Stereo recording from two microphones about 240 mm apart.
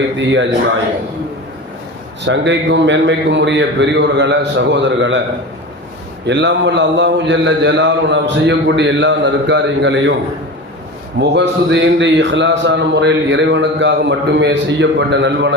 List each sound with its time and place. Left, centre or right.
0.2 s a man's voice: right
2.2 s a man's voice: right
6.2 s a man's voice: right
11.2 s a man's voice: right